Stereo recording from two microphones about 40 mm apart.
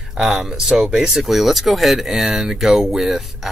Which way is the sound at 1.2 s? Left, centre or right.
Centre.